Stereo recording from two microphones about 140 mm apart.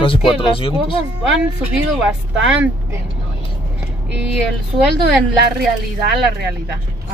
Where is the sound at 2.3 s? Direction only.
5° right (ahead or behind).